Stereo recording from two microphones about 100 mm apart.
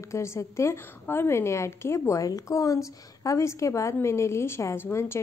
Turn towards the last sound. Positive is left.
turn(degrees=25)  # may be behind; listen again after turning